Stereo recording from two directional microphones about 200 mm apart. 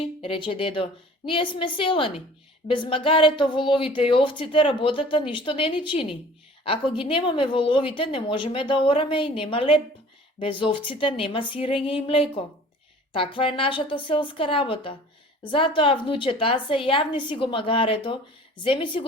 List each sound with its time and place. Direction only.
0.2 s speech: 25° left (ahead or behind)